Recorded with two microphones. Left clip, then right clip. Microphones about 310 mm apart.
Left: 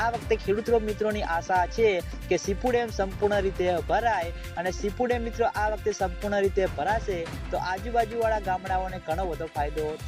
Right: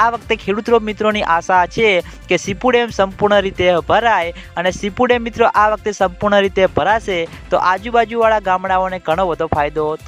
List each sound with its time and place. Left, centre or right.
0.0 s speech: right